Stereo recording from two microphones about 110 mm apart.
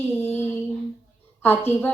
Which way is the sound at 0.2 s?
20° left (ahead or behind).